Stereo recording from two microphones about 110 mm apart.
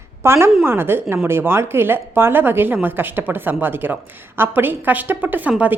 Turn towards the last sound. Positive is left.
turn(degrees=-15)  # may be behind; listen again after turning